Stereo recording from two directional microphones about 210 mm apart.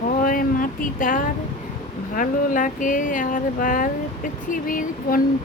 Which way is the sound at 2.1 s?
40° left (ahead or behind).